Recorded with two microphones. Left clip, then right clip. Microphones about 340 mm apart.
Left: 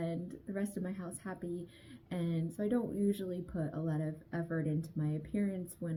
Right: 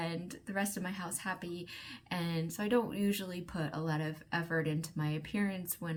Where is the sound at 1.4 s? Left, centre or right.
Centre.